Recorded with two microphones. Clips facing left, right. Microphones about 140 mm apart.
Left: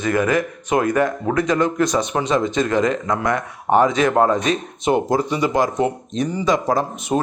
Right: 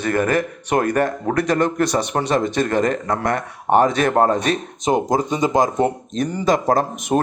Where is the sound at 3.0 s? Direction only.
35° right (ahead or behind).